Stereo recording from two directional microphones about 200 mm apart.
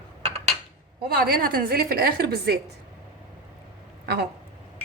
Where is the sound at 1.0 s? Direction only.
50° right (ahead or behind).